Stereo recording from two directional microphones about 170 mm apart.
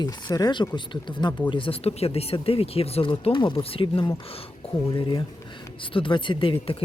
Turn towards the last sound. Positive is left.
turn(degrees=30)  # may be behind; listen again after turning